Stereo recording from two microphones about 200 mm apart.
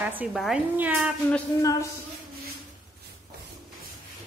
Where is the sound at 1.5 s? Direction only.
15° left (ahead or behind).